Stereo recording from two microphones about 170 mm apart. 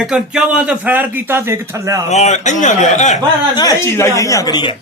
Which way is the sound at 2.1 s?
45° left (ahead or behind).